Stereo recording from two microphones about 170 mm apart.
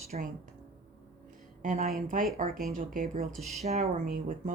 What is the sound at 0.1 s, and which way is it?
Speech, 45° right (ahead or behind).